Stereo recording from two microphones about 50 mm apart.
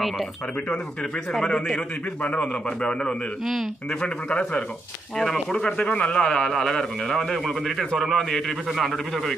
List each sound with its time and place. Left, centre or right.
2.2 s a man's voice: left
4.0 s speech: left
5.2 s a man's voice: centre
5.9 s speech: left
6.5 s a man's voice: centre